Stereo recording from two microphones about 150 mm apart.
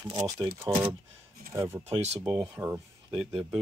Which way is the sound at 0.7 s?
35° right (ahead or behind).